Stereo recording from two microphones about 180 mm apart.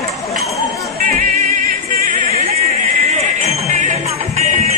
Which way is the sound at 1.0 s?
55° right (ahead or behind).